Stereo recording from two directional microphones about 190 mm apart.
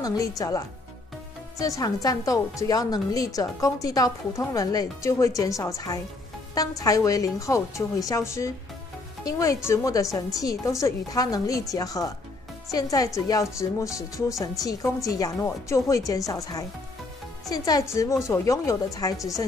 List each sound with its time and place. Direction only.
0.0 s a woman's voice: 20° left (ahead or behind)